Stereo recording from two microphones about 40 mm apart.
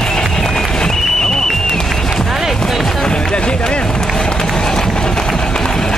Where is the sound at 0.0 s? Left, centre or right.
Centre.